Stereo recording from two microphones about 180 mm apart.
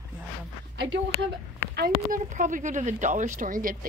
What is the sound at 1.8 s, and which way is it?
Speech, 50° right (ahead or behind).